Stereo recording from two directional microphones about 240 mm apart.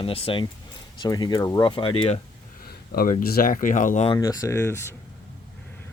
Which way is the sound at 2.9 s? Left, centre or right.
Left.